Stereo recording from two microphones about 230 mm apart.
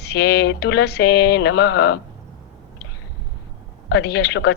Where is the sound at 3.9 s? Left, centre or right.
Left.